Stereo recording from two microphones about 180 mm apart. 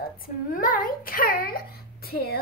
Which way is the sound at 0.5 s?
50° left (ahead or behind).